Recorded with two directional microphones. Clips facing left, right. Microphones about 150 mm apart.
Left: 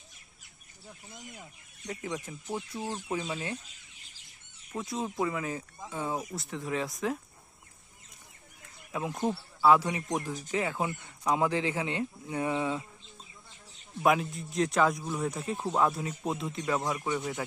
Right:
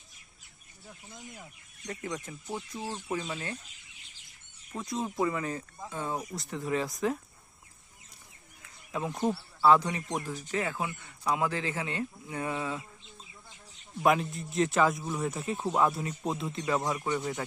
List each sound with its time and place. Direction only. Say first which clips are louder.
1.9 s speech: left 1 dB; 5° left (ahead or behind)
4.7 s speech: even; 5° left (ahead or behind)
8.9 s speech: right 1 dB; 5° left (ahead or behind)
14.0 s speech: even; centre (ahead or behind)